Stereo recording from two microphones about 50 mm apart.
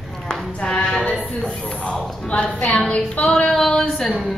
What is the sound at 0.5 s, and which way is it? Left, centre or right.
A woman's voice, centre.